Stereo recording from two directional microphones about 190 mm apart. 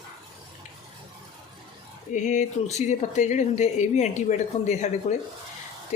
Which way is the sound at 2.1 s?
40° left (ahead or behind).